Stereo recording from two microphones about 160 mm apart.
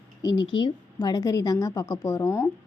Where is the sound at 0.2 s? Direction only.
25° left (ahead or behind).